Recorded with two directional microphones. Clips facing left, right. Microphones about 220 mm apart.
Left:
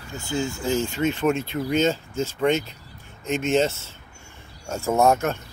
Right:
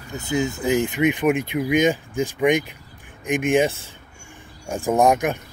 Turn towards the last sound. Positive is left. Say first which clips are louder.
# right 2 dB
turn(degrees=-15)  # may be behind; listen again after turning